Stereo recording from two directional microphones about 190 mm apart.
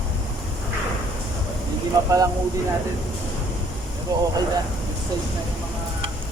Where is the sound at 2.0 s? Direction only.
15° right (ahead or behind).